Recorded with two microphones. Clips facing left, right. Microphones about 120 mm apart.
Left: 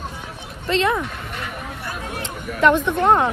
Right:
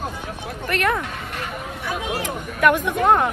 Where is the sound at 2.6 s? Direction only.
25° left (ahead or behind).